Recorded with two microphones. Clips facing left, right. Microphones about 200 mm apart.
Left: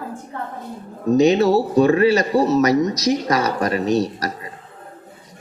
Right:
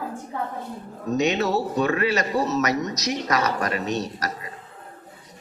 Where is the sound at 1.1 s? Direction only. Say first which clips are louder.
Left 8 dB; 30° left (ahead or behind).